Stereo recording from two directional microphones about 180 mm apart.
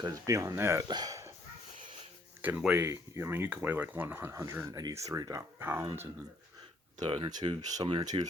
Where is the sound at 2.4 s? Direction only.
5° right (ahead or behind).